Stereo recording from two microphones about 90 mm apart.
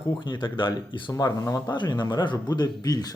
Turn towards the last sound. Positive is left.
turn(degrees=45)  # may be behind; listen again after turning